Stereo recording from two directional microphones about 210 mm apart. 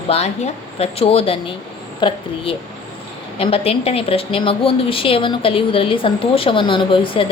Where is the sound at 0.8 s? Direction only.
30° left (ahead or behind).